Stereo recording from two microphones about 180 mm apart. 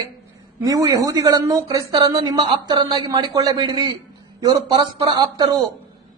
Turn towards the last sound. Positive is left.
turn(degrees=-20)  # may be behind; listen again after turning